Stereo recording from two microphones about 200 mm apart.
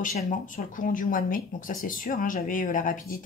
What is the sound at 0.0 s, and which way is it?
Speech, 45° left (ahead or behind).